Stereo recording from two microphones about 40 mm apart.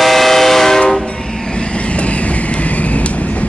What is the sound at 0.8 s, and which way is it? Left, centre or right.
Train, left.